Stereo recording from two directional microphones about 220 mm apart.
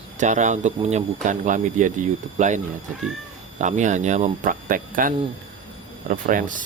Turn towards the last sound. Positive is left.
turn(degrees=-40)  # may be behind; listen again after turning